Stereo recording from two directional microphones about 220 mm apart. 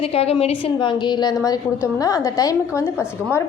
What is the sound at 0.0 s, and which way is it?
A woman's voice, 25° left (ahead or behind).